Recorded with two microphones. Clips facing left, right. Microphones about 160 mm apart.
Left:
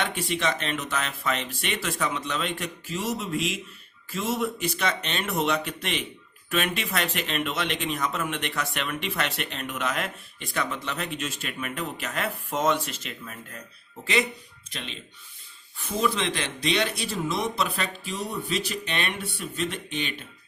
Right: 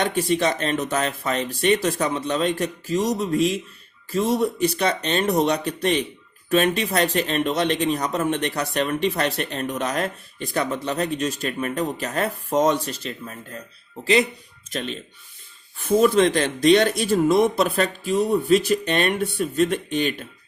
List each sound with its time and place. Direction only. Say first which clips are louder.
0.0 s a man's voice: right 7 dB; 40° right (ahead or behind)
14.7 s speech: right 10 dB; 45° right (ahead or behind)